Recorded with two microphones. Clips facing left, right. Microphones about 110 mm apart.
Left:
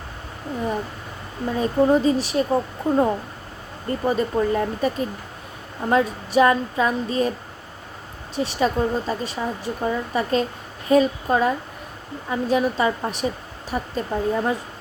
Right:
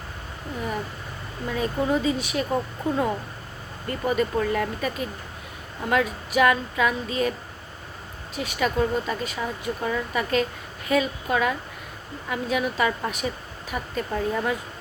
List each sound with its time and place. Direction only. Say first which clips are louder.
1.5 s speech: left 6 dB; 30° left (ahead or behind)
3.8 s speech: left 2 dB; 30° left (ahead or behind)
8.4 s speech: left 3 dB; 30° left (ahead or behind)